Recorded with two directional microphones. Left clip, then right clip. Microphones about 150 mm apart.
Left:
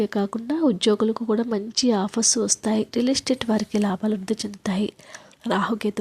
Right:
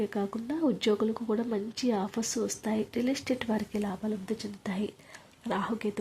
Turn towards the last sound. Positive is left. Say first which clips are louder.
# left 8 dB
turn(degrees=40)  # may be behind; listen again after turning